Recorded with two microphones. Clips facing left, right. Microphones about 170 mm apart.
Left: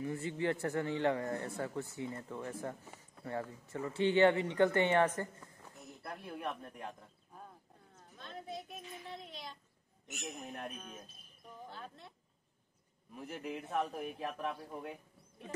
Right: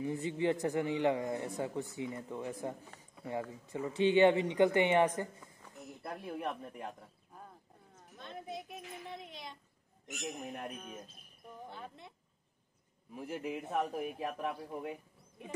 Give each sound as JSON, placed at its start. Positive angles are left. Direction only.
{"t": 0.0, "sound": "a man's voice", "side_deg": -15}
{"t": 8.2, "sound": "speech", "side_deg": -20}
{"t": 10.4, "sound": "a man's voice", "side_deg": -5}
{"t": 13.1, "sound": "a man's voice", "side_deg": -10}